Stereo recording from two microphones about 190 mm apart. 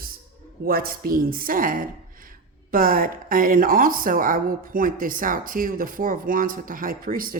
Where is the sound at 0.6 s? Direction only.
50° right (ahead or behind).